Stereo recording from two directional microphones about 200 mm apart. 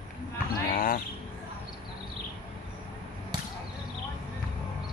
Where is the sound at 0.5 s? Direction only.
45° left (ahead or behind).